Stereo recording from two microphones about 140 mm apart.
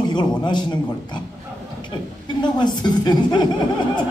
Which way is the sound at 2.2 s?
30° left (ahead or behind).